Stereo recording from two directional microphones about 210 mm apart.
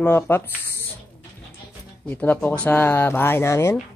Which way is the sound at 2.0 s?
10° left (ahead or behind).